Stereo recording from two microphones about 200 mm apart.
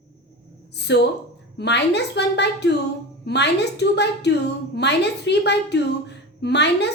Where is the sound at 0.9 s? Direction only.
60° left (ahead or behind).